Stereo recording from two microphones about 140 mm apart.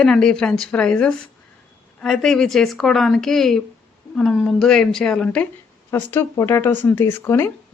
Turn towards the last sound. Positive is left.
turn(degrees=20)  # may be behind; listen again after turning